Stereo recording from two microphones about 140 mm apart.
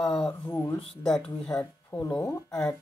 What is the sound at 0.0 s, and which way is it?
Speech, 5° left (ahead or behind).